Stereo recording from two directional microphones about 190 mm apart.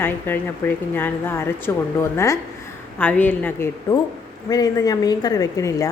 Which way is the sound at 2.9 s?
10° left (ahead or behind).